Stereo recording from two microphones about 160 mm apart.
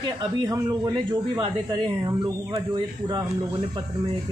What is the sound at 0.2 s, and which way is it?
Speech, 25° right (ahead or behind).